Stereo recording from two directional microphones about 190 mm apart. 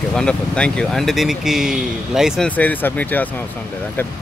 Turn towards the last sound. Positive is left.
turn(degrees=10)  # may be behind; listen again after turning